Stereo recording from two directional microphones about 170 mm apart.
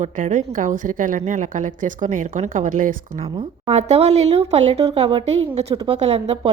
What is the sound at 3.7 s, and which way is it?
A woman's voice, 40° right (ahead or behind).